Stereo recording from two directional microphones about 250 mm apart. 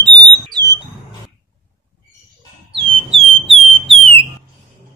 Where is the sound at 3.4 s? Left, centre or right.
Centre.